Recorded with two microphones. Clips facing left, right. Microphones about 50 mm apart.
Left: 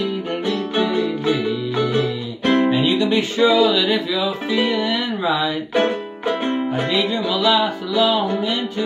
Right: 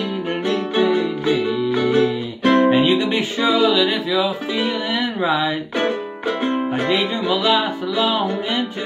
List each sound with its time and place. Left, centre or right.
1.9 s music: centre
3.2 s music: centre
5.2 s speech: centre
6.9 s music: right